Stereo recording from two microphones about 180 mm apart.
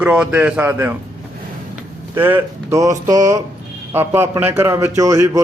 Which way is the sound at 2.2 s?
10° right (ahead or behind).